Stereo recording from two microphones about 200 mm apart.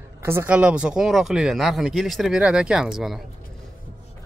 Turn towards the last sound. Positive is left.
turn(degrees=0)  # may be behind; listen again after turning